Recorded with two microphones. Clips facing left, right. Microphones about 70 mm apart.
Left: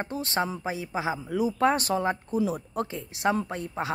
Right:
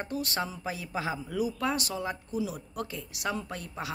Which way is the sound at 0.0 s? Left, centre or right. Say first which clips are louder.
Left 4 dB; left.